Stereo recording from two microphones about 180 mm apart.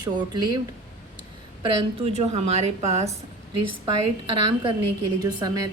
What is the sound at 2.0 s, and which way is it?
A woman's voice, 35° right (ahead or behind).